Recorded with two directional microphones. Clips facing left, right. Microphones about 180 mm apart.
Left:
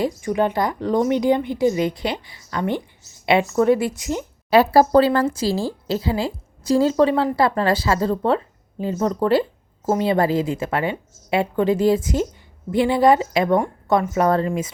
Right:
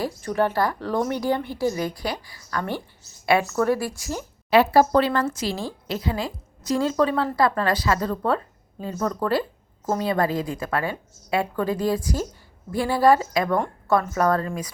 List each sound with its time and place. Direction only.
0.0 s a woman's voice: 15° left (ahead or behind)
4.4 s a woman's voice: 40° left (ahead or behind)